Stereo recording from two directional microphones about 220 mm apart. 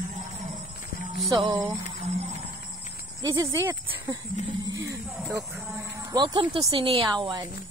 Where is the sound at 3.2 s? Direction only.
15° right (ahead or behind).